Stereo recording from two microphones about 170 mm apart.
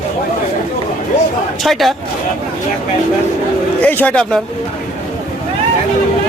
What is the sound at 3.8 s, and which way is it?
Speech, 10° left (ahead or behind).